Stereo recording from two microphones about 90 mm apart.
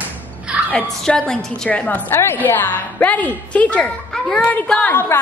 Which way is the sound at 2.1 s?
25° left (ahead or behind).